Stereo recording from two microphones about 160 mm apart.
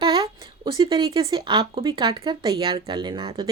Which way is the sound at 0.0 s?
30° right (ahead or behind).